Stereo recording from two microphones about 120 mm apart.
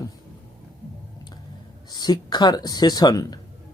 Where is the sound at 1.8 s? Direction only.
35° left (ahead or behind).